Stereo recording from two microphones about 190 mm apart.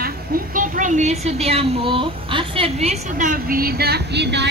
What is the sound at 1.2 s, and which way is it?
A woman's voice, 30° right (ahead or behind).